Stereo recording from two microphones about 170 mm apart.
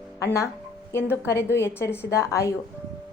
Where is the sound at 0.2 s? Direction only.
15° left (ahead or behind).